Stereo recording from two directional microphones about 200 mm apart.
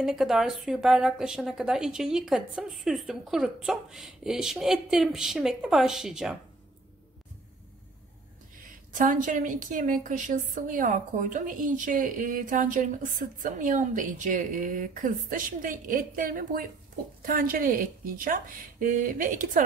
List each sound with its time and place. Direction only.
0.0 s a woman's voice: centre (ahead or behind)
8.9 s a woman's voice: 40° right (ahead or behind)